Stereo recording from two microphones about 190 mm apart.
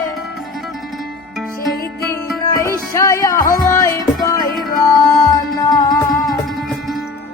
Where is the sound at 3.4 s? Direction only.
45° left (ahead or behind).